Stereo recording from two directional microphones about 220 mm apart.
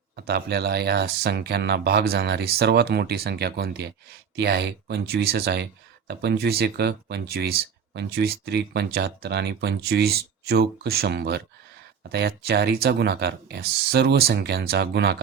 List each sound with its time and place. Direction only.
0.3 s speech: 45° right (ahead or behind)